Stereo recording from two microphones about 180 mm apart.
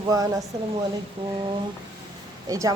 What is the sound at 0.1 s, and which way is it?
Speech, 20° right (ahead or behind).